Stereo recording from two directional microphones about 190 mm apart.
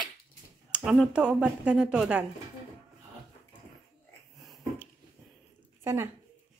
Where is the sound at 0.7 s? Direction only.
5° right (ahead or behind).